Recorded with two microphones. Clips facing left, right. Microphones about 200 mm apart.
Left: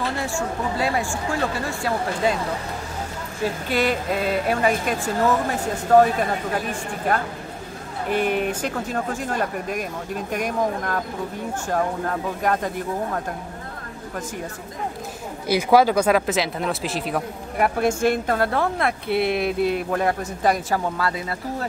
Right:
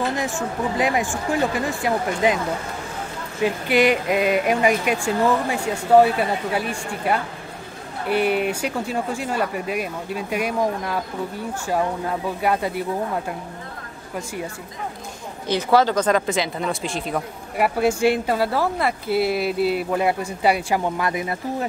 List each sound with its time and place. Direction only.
0.1 s speech: 15° right (ahead or behind)
3.4 s speech: 15° right (ahead or behind)
15.4 s speech: 10° left (ahead or behind); by 21.6 s 20° right (ahead or behind)